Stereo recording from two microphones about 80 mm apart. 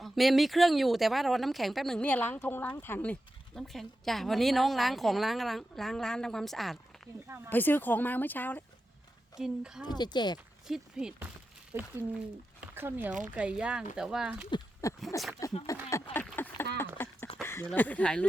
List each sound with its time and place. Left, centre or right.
0.0 s speech: centre
2.0 s speech: centre
3.5 s speech: centre
7.5 s speech: left
9.4 s speech: centre
9.8 s speech: left
10.7 s speech: centre
11.7 s speech: right
12.5 s speech: right; by 14.3 s centre
14.8 s speech: left
15.9 s a sound: left
17.7 s speech: centre